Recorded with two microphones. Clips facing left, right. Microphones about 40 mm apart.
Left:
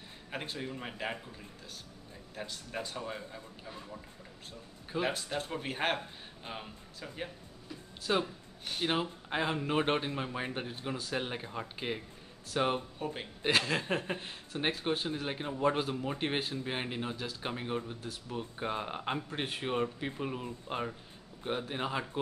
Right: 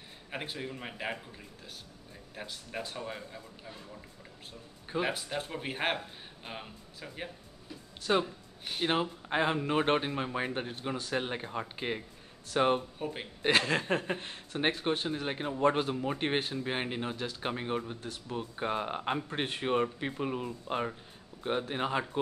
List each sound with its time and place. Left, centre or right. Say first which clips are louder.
0.3 s speech: right 1 dB; centre
2.3 s speech: even; centre
4.8 s a man's voice: right 1 dB; centre